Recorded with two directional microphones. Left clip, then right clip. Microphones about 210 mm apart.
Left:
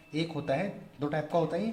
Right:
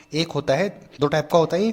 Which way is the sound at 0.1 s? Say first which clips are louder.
Right 10 dB; 40° right (ahead or behind).